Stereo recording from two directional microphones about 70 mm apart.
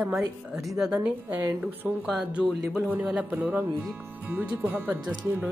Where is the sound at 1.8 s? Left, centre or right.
Centre.